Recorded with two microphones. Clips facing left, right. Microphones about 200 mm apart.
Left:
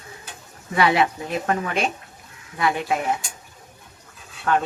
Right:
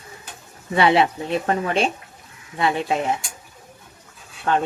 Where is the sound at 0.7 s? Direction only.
25° right (ahead or behind).